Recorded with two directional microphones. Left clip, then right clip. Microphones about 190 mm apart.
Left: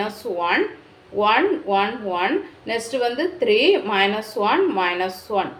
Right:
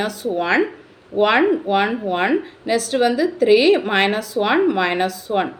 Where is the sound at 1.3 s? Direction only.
40° right (ahead or behind).